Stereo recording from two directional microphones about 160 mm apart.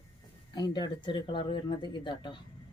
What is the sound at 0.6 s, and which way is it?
Speech, 25° left (ahead or behind).